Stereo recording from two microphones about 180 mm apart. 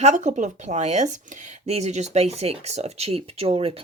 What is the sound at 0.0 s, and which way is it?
Speech, 40° right (ahead or behind).